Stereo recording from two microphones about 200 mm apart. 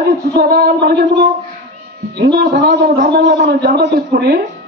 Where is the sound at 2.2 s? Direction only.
55° right (ahead or behind).